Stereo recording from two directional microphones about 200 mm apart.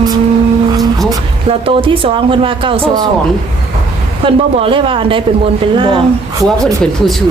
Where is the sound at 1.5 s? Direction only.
25° right (ahead or behind).